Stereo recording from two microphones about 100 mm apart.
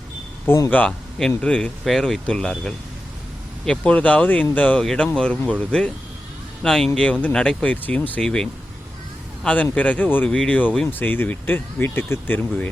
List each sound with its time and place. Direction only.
0.4 s speech: 30° left (ahead or behind)
0.7 s speech: 15° left (ahead or behind)
4.8 s a man's voice: 5° left (ahead or behind)